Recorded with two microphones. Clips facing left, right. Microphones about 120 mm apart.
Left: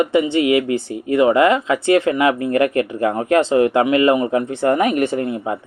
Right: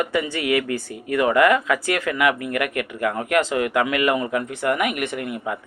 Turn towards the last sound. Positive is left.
turn(degrees=30)  # may be behind; listen again after turning